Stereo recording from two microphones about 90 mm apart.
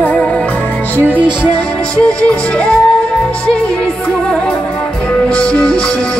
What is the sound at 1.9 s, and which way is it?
Music, 10° left (ahead or behind).